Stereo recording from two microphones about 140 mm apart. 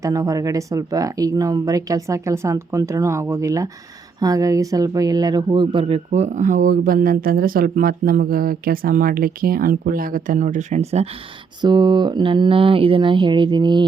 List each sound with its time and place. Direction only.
0.0 s speech: 25° right (ahead or behind)
6.1 s speech: 55° right (ahead or behind)
11.6 s speech: 30° right (ahead or behind)